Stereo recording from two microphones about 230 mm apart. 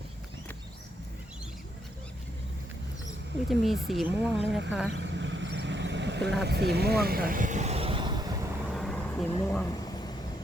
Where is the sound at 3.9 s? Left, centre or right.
Centre.